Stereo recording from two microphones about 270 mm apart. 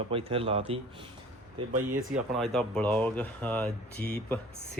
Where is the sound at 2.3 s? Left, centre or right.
Centre.